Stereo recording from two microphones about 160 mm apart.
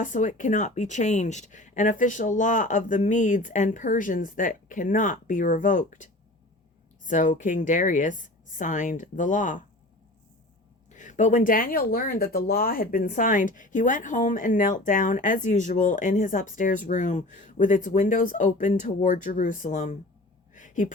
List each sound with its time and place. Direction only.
0.0 s speech: 50° left (ahead or behind)
10.9 s speech: 50° left (ahead or behind)
20.5 s a sound: 50° left (ahead or behind)